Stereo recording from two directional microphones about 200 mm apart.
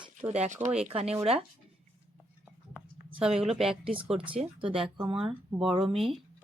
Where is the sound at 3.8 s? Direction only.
30° right (ahead or behind).